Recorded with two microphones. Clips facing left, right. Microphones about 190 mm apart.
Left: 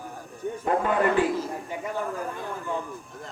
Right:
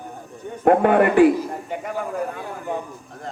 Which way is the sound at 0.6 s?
65° right (ahead or behind).